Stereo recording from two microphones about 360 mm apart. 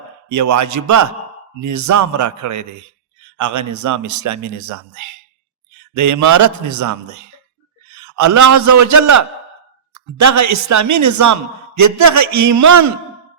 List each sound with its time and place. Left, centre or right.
0.3 s a man's voice: right